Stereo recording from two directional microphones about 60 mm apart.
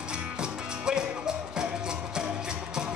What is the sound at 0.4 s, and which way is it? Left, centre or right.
Music, centre.